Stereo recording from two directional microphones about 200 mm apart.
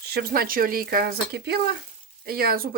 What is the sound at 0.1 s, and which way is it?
Speech, 50° right (ahead or behind).